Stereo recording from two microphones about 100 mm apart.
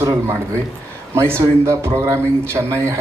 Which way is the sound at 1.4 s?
25° right (ahead or behind).